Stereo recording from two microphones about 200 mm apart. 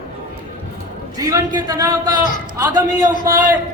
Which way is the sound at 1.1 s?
20° right (ahead or behind).